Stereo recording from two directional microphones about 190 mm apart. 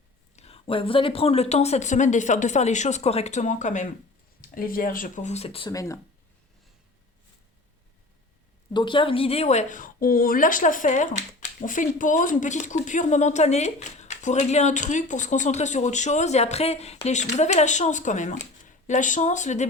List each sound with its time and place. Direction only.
0.3 s a woman's voice: 30° left (ahead or behind)
8.7 s a woman's voice: 25° left (ahead or behind)